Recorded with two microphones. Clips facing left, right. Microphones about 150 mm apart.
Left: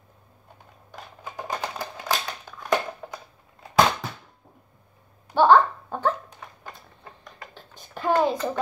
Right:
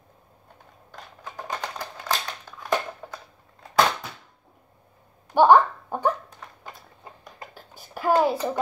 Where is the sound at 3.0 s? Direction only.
5° left (ahead or behind).